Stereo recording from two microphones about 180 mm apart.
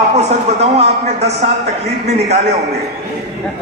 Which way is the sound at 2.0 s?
40° right (ahead or behind).